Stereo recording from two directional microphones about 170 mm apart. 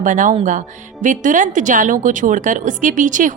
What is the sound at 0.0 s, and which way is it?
A woman's voice, 50° right (ahead or behind).